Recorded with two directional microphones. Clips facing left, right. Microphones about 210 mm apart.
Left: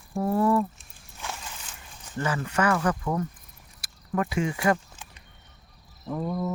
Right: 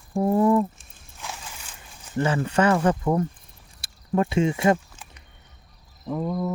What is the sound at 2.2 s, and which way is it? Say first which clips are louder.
Speech: right 5 dB; 30° right (ahead or behind).